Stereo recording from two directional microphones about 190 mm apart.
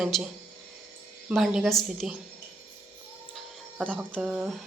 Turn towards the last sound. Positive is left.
turn(degrees=0)  # may be behind; listen again after turning